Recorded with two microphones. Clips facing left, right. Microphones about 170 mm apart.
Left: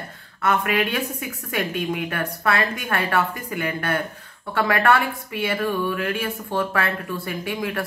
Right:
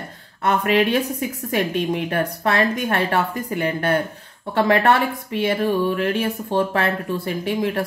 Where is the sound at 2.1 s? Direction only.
30° right (ahead or behind).